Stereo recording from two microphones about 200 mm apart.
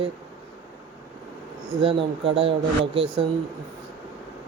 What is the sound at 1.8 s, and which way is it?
Speech, 25° right (ahead or behind).